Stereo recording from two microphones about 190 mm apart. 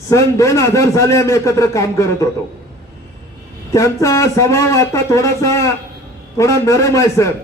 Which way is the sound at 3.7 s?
15° left (ahead or behind).